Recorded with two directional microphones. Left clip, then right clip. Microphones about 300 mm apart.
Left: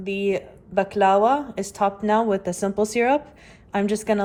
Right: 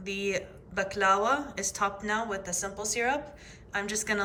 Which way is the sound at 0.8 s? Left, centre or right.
Left.